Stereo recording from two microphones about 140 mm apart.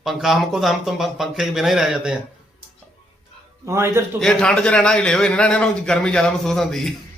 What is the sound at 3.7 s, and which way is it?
Speech, 20° right (ahead or behind).